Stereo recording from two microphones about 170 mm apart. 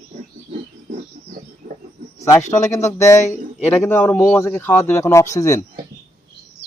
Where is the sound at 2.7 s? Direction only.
15° left (ahead or behind).